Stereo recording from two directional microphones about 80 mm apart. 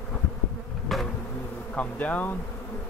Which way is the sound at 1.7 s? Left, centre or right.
Centre.